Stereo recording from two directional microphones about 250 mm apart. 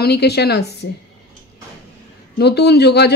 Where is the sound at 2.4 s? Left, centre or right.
Left.